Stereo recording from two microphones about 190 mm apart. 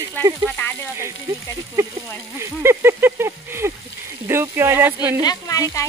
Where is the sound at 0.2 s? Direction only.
10° left (ahead or behind).